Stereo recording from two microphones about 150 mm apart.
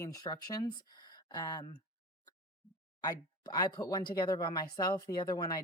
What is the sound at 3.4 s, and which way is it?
Speech, 25° left (ahead or behind).